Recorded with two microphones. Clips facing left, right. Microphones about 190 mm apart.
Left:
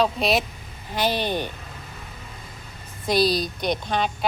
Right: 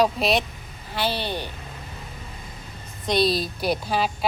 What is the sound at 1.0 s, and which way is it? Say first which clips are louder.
Speech: left 3 dB; 15° left (ahead or behind).